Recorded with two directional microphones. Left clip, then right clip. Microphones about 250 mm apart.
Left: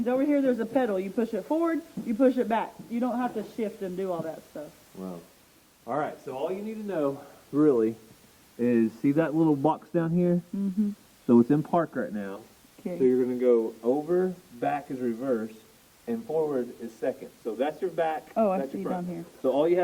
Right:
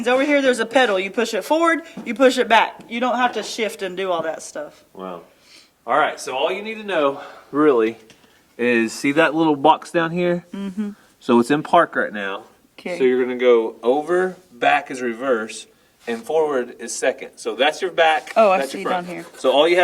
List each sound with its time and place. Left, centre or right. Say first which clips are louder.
0.0 s speech: right 9 dB; centre
5.8 s speech: right 12 dB; centre
13.7 s speech: right 8 dB; right
14.1 s speech: right 7 dB; centre